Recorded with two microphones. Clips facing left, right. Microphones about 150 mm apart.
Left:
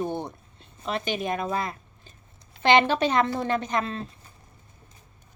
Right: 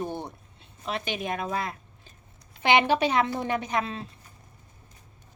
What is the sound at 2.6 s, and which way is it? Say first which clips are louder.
A woman's voice: left 2 dB; 10° right (ahead or behind).